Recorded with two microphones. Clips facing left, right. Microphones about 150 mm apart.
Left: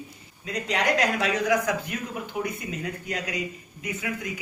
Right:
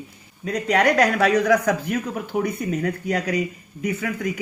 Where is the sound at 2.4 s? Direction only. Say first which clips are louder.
Right 8 dB; 55° right (ahead or behind).